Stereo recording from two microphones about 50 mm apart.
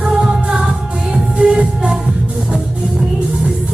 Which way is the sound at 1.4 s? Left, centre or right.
Centre.